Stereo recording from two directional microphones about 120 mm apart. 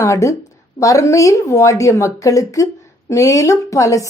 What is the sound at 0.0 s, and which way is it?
A woman's voice, 25° left (ahead or behind).